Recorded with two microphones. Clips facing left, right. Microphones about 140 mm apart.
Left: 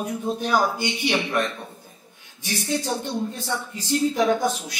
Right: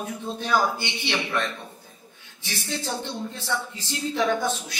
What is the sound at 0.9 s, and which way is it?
Speech, 15° left (ahead or behind).